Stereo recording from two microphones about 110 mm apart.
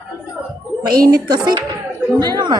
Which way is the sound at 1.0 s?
35° right (ahead or behind).